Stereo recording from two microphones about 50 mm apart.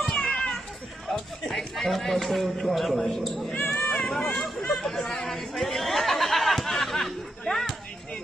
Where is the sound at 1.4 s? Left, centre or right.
Centre.